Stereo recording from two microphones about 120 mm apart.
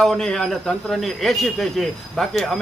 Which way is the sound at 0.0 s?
5° left (ahead or behind).